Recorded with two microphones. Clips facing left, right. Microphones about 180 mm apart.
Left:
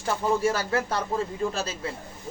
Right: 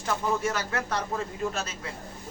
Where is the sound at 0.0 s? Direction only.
30° left (ahead or behind).